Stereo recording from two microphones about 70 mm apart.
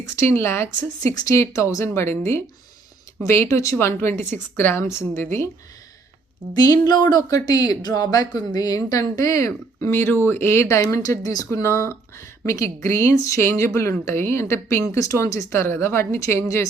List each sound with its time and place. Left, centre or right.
0.0 s a woman's voice: left
1.0 s a woman's voice: left
6.8 s speech: left
7.3 s speech: left
10.8 s speech: left
11.6 s a woman's voice: left
14.9 s speech: left